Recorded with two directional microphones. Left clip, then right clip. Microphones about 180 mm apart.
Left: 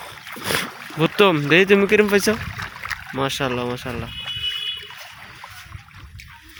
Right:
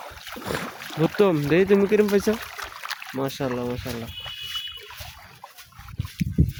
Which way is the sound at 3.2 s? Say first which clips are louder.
Left 5 dB; 5° left (ahead or behind).